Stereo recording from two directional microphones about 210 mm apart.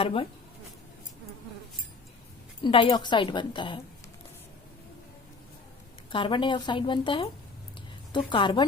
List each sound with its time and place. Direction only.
0.0 s speech: 25° left (ahead or behind)
2.6 s speech: 25° left (ahead or behind)
6.1 s speech: 25° left (ahead or behind)
8.3 s speech: 20° left (ahead or behind)